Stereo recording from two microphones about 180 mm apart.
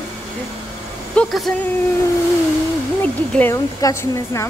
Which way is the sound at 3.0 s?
10° left (ahead or behind).